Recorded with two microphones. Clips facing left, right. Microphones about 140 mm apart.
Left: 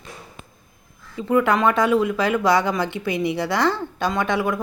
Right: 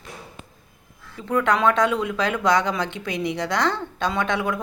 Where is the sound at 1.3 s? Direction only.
5° left (ahead or behind).